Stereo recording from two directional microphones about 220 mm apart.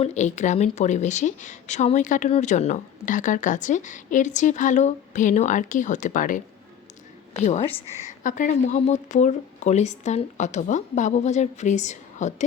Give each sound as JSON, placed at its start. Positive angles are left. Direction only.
{"t": 0.0, "sound": "a woman's voice", "side_deg": 30}